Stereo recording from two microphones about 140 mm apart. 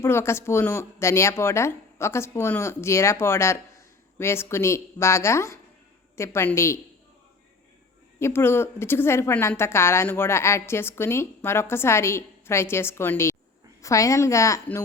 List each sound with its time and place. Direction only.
0.0 s speech: 20° left (ahead or behind)
8.2 s a woman's voice: 15° left (ahead or behind)